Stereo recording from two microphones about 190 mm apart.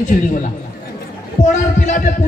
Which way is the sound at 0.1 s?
40° left (ahead or behind).